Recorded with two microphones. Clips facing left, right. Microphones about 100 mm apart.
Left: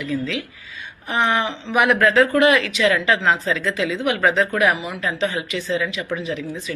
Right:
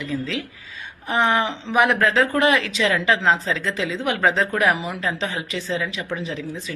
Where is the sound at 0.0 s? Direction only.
35° right (ahead or behind).